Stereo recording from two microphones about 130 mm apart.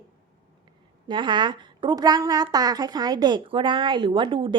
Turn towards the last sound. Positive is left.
turn(degrees=-40)  # may be behind; listen again after turning